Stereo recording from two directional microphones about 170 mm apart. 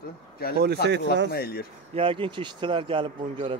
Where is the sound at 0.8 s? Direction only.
90° right.